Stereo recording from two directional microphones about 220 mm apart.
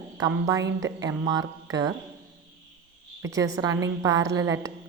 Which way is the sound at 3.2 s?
15° right (ahead or behind).